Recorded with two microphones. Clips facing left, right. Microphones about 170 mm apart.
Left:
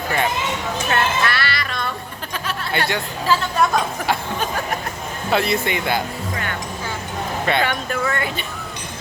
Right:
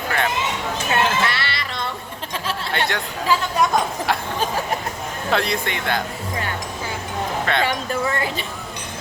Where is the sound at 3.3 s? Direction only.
15° right (ahead or behind).